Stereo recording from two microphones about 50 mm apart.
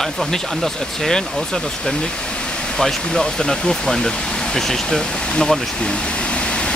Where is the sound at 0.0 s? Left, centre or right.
Centre.